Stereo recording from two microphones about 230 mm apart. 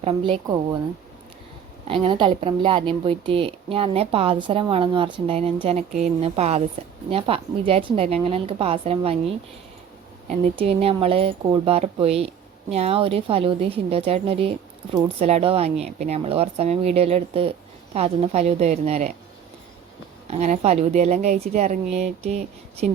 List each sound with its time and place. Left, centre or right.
0.0 s a woman's voice: right
0.4 s speech: centre
1.9 s a woman's voice: right
10.6 s a woman's voice: right
20.2 s a woman's voice: right